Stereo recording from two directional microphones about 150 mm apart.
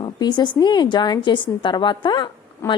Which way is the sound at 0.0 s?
30° left (ahead or behind).